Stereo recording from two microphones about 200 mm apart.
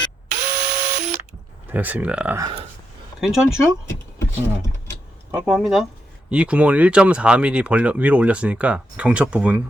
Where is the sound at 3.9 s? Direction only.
15° left (ahead or behind).